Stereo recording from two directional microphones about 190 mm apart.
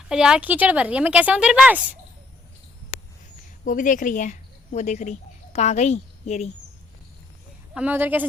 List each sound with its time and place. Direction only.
0.1 s a woman's voice: 5° right (ahead or behind)
2.9 s a sound: 45° left (ahead or behind)
3.6 s a woman's voice: 45° left (ahead or behind)
7.7 s a woman's voice: 5° right (ahead or behind)